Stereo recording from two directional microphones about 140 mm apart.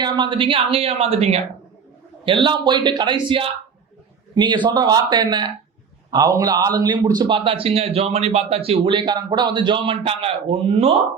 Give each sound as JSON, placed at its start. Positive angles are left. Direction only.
{"t": 0.0, "sound": "a man's voice", "side_deg": -35}
{"t": 2.2, "sound": "a man's voice", "side_deg": -35}